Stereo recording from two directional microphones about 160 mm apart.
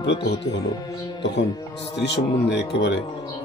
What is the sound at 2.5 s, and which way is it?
Speech, 90° left.